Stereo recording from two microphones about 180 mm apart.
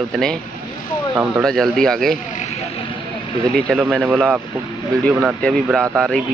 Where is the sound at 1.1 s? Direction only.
Centre (ahead or behind).